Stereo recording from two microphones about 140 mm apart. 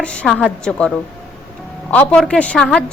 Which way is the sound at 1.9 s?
10° left (ahead or behind).